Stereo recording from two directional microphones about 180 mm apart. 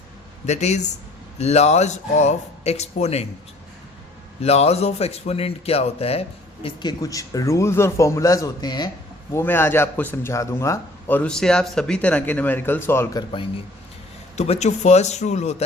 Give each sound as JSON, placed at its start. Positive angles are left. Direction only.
{"t": 0.4, "sound": "a man's voice", "side_deg": 40}
{"t": 4.4, "sound": "a man's voice", "side_deg": 35}
{"t": 9.3, "sound": "a man's voice", "side_deg": 10}
{"t": 14.3, "sound": "a man's voice", "side_deg": 35}